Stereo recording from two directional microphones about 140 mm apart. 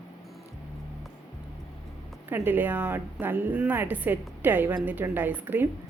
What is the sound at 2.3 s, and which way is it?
A woman's voice, 15° right (ahead or behind).